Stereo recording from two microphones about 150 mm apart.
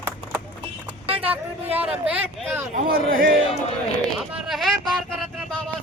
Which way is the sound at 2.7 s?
70° right (ahead or behind).